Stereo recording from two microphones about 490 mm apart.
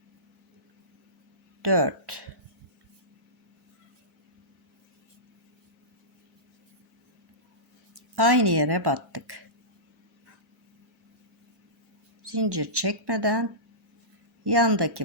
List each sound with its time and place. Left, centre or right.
1.6 s speech: right
7.9 s speech: right
12.2 s speech: right